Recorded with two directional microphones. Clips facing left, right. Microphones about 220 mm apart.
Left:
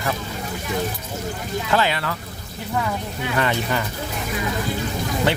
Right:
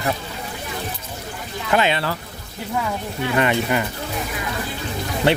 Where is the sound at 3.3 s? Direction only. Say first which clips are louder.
Right 3 dB; 15° right (ahead or behind).